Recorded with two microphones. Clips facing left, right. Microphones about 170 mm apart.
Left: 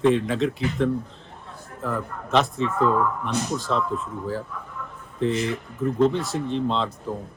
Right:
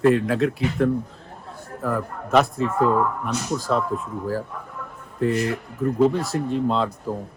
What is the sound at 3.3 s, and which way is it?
Speech, 40° right (ahead or behind).